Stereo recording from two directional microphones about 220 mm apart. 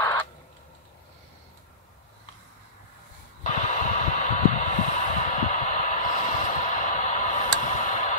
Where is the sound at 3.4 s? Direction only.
35° left (ahead or behind).